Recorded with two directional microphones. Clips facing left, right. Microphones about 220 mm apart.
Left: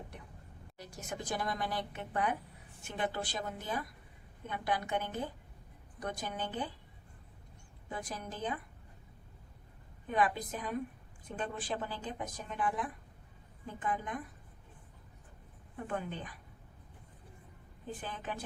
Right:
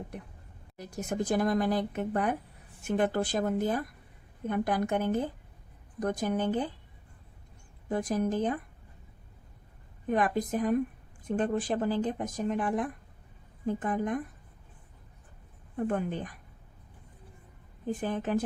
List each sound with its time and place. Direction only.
0.8 s speech: 45° right (ahead or behind)
7.9 s speech: 45° right (ahead or behind)
10.1 s speech: 45° right (ahead or behind)
15.7 s speech: 45° right (ahead or behind)
18.0 s speech: 45° right (ahead or behind)